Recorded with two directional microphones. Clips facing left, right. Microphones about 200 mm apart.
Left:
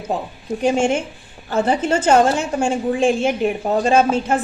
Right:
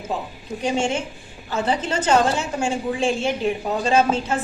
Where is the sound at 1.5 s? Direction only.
50° left (ahead or behind).